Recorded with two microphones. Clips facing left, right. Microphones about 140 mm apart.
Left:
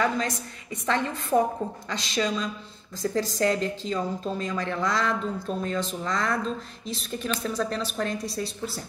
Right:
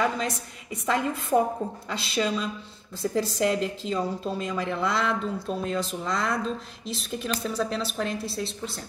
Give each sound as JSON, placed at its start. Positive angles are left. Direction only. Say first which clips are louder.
{"t": 0.8, "sound": "a woman's voice", "louder": "right 1 dB", "side_deg": -5}